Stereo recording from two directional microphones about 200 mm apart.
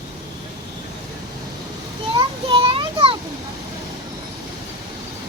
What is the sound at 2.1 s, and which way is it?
Child singing, 25° right (ahead or behind).